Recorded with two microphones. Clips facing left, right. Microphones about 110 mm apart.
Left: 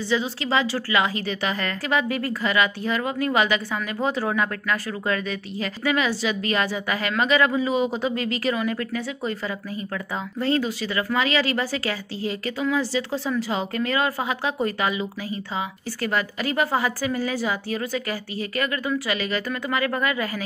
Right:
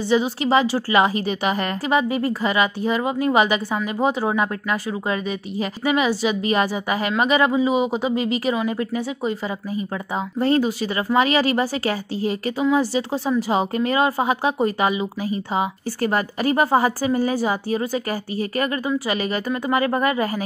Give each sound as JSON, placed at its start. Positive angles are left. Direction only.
{"t": 0.0, "sound": "speech", "side_deg": -15}
{"t": 1.2, "sound": "speech", "side_deg": -15}
{"t": 2.9, "sound": "a woman's voice", "side_deg": -20}
{"t": 16.0, "sound": "a woman's voice", "side_deg": -40}